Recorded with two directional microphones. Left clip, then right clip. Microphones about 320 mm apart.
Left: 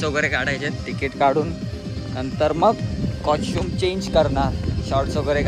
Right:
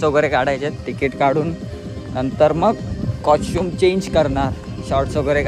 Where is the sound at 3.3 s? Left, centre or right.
Centre.